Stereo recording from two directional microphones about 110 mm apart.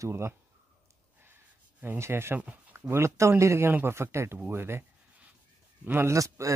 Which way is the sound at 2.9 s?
25° right (ahead or behind).